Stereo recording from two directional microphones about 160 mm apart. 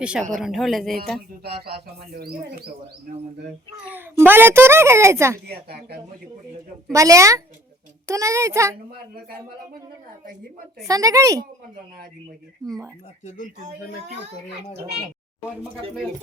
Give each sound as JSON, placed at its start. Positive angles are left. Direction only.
{"t": 0.3, "sound": "speech", "side_deg": 0}
{"t": 1.5, "sound": "speech", "side_deg": -75}
{"t": 3.8, "sound": "a child's voice", "side_deg": -10}
{"t": 6.9, "sound": "a child's voice", "side_deg": -20}
{"t": 10.8, "sound": "a child's voice", "side_deg": -20}
{"t": 12.6, "sound": "a child's voice", "side_deg": -25}
{"t": 13.2, "sound": "speech", "side_deg": 55}